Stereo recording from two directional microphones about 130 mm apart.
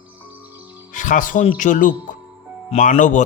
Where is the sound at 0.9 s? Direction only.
90° left.